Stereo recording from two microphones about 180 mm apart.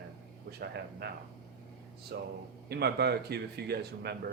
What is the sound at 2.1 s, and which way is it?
Speech, 60° right (ahead or behind).